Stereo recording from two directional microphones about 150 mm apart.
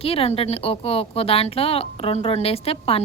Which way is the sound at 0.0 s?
40° left (ahead or behind).